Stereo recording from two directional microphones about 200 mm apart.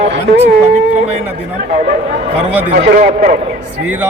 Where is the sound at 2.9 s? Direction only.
40° right (ahead or behind).